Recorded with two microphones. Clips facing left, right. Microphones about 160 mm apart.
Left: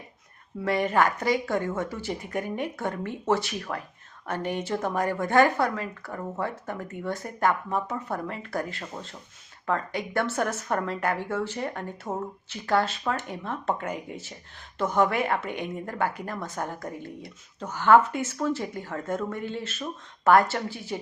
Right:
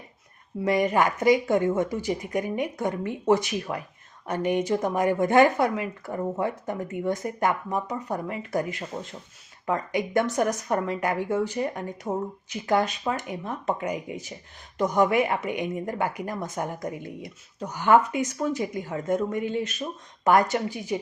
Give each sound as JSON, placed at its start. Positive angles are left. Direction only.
{"t": 0.6, "sound": "a woman's voice", "side_deg": -15}